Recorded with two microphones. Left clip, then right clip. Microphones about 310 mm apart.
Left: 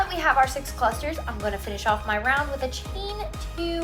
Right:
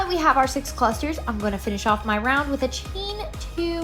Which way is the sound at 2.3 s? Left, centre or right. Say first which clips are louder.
Right 2 dB; right.